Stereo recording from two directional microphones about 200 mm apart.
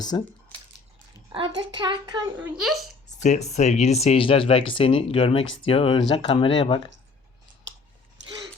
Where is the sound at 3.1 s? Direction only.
35° left (ahead or behind).